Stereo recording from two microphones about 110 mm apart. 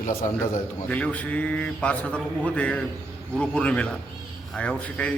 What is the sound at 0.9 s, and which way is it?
A man's voice, 10° left (ahead or behind).